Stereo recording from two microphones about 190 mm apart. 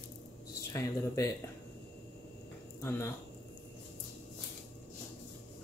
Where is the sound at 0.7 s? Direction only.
15° left (ahead or behind).